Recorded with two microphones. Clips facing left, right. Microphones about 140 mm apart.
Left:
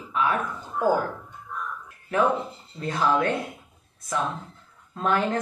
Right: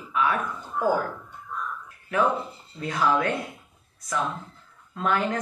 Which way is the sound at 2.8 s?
30° left (ahead or behind).